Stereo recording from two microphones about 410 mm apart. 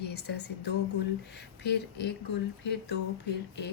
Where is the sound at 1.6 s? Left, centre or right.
Left.